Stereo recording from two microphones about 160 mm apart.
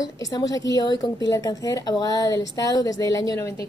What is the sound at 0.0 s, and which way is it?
A woman's voice, 25° left (ahead or behind).